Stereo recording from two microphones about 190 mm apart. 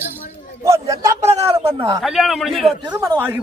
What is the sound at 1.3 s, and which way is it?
Speech, 35° right (ahead or behind).